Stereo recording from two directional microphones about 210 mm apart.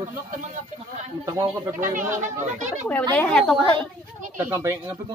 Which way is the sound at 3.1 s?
5° left (ahead or behind).